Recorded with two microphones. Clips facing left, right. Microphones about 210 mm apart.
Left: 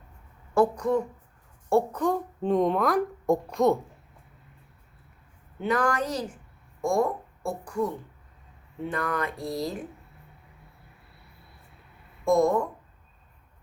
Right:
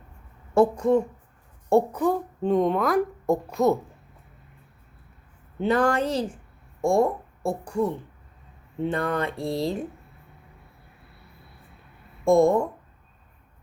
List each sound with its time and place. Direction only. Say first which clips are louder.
0.5 s speech: right 4 dB; 25° right (ahead or behind)
1.7 s a woman's voice: right 3 dB; 10° right (ahead or behind)
5.5 s speech: right 4 dB; 30° right (ahead or behind)
12.2 s speech: right 4 dB; 25° right (ahead or behind)